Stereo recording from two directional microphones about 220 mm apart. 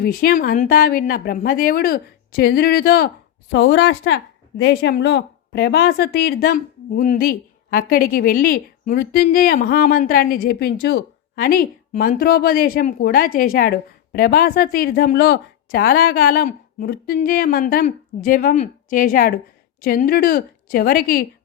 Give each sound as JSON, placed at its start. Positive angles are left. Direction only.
{"t": 0.0, "sound": "a woman's voice", "side_deg": 45}